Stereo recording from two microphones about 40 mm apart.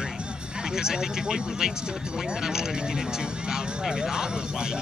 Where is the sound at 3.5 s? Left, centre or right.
Centre.